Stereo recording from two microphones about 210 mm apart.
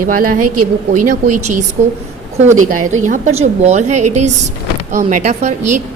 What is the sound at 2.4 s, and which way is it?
Speech, 90° right.